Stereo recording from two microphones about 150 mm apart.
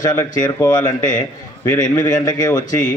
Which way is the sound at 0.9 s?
60° left (ahead or behind).